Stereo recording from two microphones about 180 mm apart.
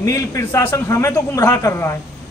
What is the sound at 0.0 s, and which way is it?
Speech, 15° left (ahead or behind).